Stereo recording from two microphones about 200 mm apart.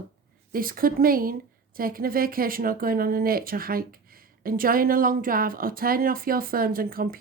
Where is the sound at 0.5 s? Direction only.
45° right (ahead or behind).